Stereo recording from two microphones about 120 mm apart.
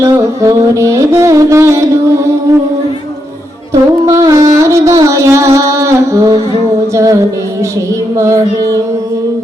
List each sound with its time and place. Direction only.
0.0 s music: 25° right (ahead or behind)
4.0 s music: 25° right (ahead or behind)
5.5 s humming: 25° right (ahead or behind)
6.9 s music: 25° right (ahead or behind)
8.1 s child singing: 25° right (ahead or behind)